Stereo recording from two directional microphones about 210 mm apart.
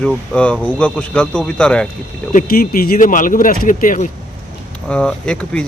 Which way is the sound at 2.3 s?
45° left (ahead or behind).